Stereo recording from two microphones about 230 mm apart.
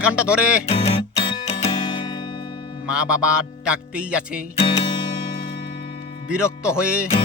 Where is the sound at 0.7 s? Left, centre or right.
Left.